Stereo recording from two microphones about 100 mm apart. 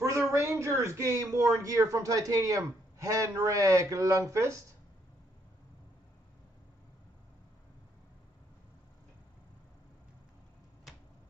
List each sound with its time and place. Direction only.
0.3 s speech: 30° right (ahead or behind)